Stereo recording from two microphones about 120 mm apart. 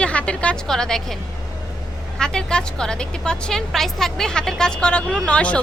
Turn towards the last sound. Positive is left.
turn(degrees=10)  # may be behind; listen again after turning